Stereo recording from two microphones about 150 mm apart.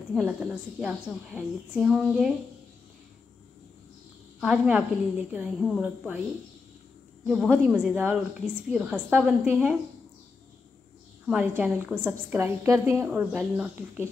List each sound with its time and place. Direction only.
0.1 s a woman's voice: 5° right (ahead or behind)
4.4 s a woman's voice: 5° right (ahead or behind)
7.2 s a woman's voice: 5° right (ahead or behind)
11.2 s a woman's voice: 10° right (ahead or behind)
13.0 s a woman's voice: 5° right (ahead or behind)